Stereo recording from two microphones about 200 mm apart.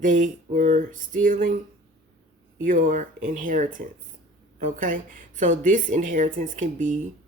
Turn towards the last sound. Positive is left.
turn(degrees=-40)  # may be behind; listen again after turning